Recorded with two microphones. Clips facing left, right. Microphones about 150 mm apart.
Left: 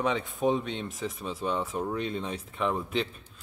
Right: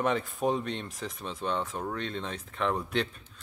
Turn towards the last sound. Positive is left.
turn(degrees=0)  # may be behind; listen again after turning